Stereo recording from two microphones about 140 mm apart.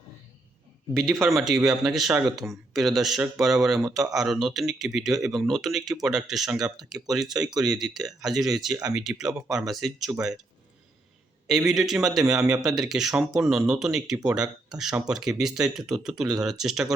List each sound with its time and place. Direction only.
0.9 s speech: centre (ahead or behind)
11.4 s speech: centre (ahead or behind)